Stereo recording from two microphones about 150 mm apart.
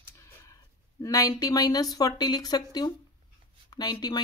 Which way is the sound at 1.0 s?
20° left (ahead or behind).